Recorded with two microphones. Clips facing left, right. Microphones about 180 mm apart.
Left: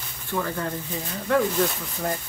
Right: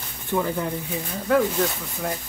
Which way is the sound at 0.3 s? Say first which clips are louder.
Right 3 dB; 15° right (ahead or behind).